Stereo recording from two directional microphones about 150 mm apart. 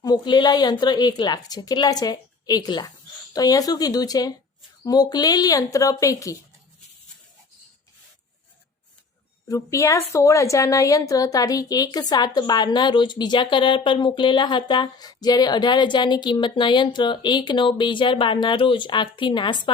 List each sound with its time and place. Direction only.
0.0 s a woman's voice: 30° left (ahead or behind)
9.5 s a woman's voice: 20° left (ahead or behind)